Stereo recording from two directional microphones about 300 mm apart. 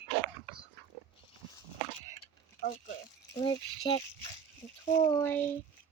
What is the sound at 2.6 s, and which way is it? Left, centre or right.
Speech, left.